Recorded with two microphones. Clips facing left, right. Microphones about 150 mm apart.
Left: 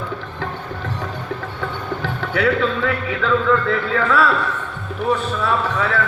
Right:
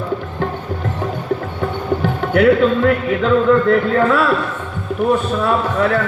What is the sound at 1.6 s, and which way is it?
Music, 45° right (ahead or behind).